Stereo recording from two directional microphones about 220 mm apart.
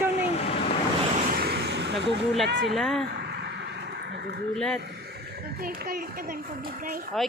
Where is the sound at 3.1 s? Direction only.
50° right (ahead or behind).